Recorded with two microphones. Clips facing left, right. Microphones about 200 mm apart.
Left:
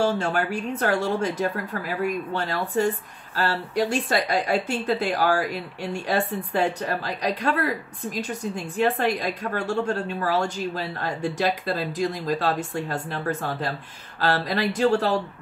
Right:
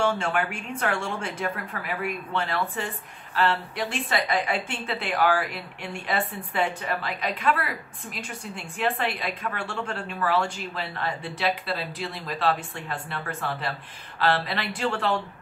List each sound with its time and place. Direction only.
0.0 s a woman's voice: 35° left (ahead or behind)